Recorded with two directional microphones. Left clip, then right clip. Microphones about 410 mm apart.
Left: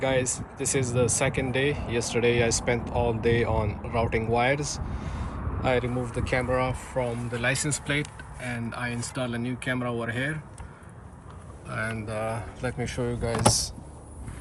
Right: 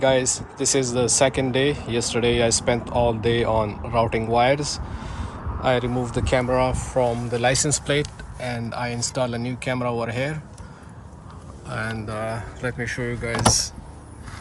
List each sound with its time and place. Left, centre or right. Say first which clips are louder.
0.0 s speech: right 6 dB; centre
11.7 s speech: right 2 dB; centre